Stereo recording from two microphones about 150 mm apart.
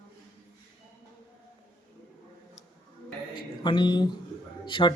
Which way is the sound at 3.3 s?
30° left (ahead or behind).